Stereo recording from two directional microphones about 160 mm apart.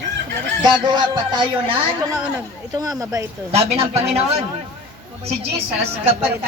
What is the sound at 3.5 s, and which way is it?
Speech, 40° right (ahead or behind).